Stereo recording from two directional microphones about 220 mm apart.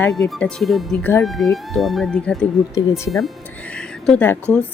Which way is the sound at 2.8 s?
15° left (ahead or behind).